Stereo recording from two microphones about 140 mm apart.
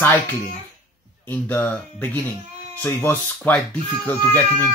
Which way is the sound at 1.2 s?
15° left (ahead or behind).